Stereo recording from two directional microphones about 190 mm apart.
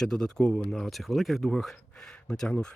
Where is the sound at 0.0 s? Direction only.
5° left (ahead or behind).